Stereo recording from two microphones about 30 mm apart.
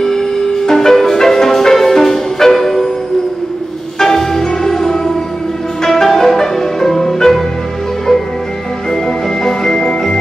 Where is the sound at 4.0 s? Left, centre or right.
Centre.